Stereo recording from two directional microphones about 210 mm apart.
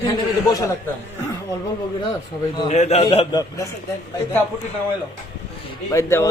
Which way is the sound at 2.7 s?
30° left (ahead or behind).